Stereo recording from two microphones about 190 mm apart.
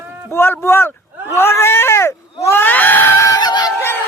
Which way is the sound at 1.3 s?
15° left (ahead or behind).